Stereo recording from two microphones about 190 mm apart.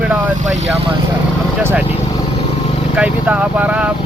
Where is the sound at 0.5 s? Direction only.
35° right (ahead or behind).